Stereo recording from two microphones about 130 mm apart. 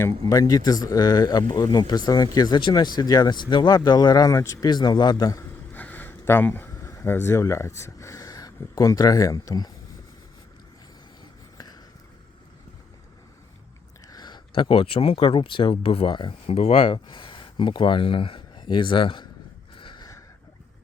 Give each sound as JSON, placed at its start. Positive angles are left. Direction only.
{"t": 0.0, "sound": "speech", "side_deg": 30}
{"t": 5.7, "sound": "speech", "side_deg": 15}
{"t": 11.2, "sound": "a sound", "side_deg": 30}
{"t": 14.1, "sound": "speech", "side_deg": 35}
{"t": 16.6, "sound": "speech", "side_deg": 50}
{"t": 19.7, "sound": "a sound", "side_deg": 40}